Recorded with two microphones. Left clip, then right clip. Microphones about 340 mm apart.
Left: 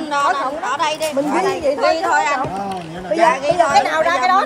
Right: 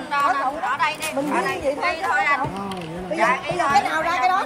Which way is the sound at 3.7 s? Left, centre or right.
Left.